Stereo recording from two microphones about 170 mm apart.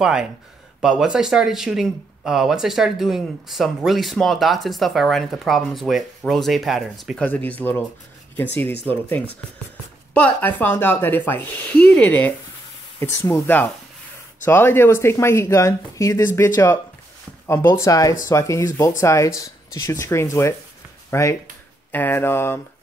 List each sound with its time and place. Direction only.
0.0 s speech: 5° right (ahead or behind)
10.1 s speech: 10° left (ahead or behind)